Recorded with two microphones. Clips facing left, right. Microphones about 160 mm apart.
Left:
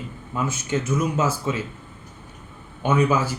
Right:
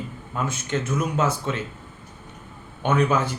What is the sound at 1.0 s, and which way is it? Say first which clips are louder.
Speech: left 1 dB; 5° left (ahead or behind).